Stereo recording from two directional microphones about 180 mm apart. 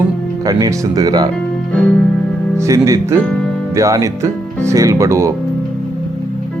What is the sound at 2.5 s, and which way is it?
Speech, 15° right (ahead or behind).